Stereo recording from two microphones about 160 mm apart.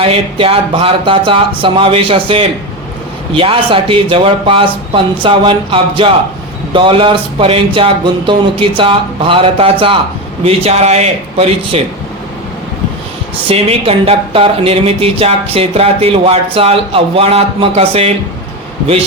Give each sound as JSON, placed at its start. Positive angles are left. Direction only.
{"t": 0.0, "sound": "speech", "side_deg": -35}
{"t": 13.5, "sound": "speech", "side_deg": -35}